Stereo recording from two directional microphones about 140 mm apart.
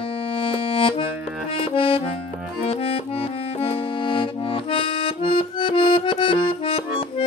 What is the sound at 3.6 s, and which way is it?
Accordion, 40° left (ahead or behind).